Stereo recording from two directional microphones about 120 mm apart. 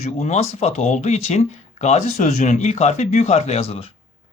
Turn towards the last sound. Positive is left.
turn(degrees=55)  # may be behind; listen again after turning